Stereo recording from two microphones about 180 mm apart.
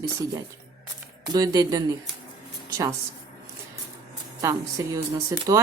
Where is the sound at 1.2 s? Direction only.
20° right (ahead or behind).